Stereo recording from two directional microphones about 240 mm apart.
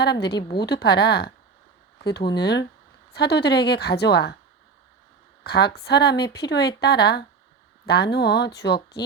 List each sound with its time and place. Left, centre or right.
0.0 s speech: left
0.3 s a woman's voice: centre
0.6 s speech: left
5.4 s speech: left